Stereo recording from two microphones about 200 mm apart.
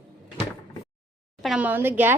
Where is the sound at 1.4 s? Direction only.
5° right (ahead or behind).